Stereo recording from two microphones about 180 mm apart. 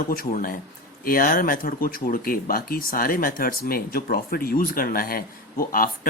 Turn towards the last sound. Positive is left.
turn(degrees=50)  # may be behind; listen again after turning